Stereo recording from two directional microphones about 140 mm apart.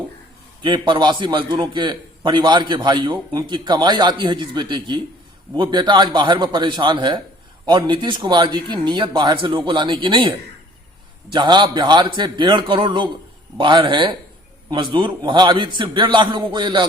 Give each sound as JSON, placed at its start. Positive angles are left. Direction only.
{"t": 0.6, "sound": "a man's voice", "side_deg": -35}